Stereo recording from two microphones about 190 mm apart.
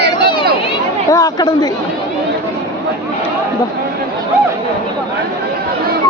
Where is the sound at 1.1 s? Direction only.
20° left (ahead or behind).